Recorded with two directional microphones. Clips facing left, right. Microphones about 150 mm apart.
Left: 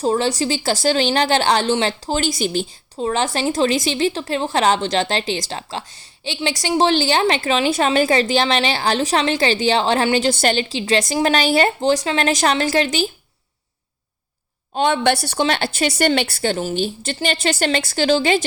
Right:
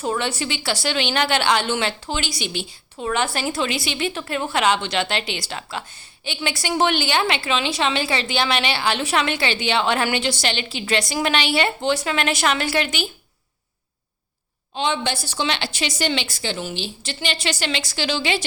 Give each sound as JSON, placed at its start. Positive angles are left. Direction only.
{"t": 0.0, "sound": "a woman's voice", "side_deg": 35}
{"t": 3.0, "sound": "a woman's voice", "side_deg": 30}
{"t": 10.2, "sound": "a woman's voice", "side_deg": 45}
{"t": 14.8, "sound": "a woman's voice", "side_deg": 55}